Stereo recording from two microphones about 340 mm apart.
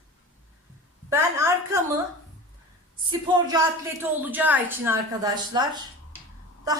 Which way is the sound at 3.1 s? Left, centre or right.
Centre.